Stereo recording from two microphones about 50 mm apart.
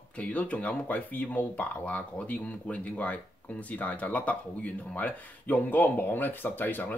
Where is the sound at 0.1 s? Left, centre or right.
Left.